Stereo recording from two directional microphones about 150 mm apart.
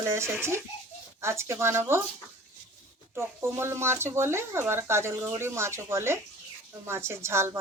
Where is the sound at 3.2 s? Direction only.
15° right (ahead or behind).